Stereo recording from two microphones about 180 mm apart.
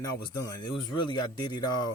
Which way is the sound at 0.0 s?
20° left (ahead or behind).